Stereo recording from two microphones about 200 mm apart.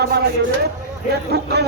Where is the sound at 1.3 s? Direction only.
55° right (ahead or behind).